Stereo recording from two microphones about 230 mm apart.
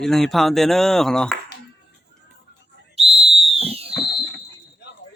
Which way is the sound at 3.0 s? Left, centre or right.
Right.